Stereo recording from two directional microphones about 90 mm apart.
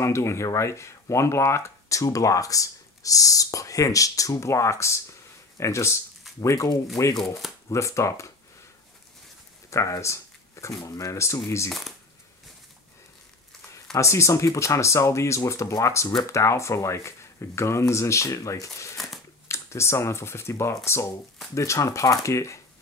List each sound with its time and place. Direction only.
0.0 s speech: 30° left (ahead or behind)
9.7 s speech: 35° left (ahead or behind)
13.9 s speech: 35° left (ahead or behind)
18.9 s a sound: centre (ahead or behind)
19.4 s speech: 30° left (ahead or behind)